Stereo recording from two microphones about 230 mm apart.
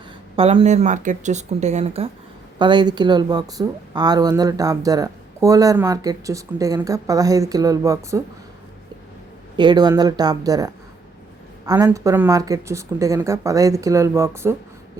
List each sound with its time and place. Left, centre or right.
0.3 s a woman's voice: right
9.6 s a woman's voice: centre